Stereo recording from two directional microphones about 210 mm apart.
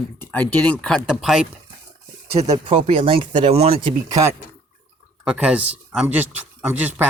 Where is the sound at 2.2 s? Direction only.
25° right (ahead or behind).